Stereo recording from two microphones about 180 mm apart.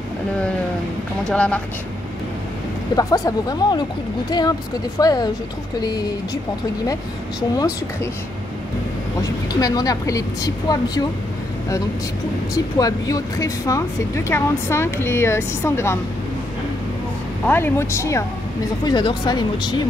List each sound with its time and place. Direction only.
1.2 s speech: 5° left (ahead or behind)
3.0 s speech: 20° left (ahead or behind)
7.5 s speech: 15° left (ahead or behind)
9.2 s speech: 20° left (ahead or behind)
12.5 s speech: 20° left (ahead or behind)
17.5 s speech: 15° left (ahead or behind)